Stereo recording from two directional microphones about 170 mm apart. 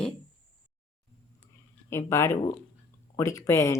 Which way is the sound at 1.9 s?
15° left (ahead or behind).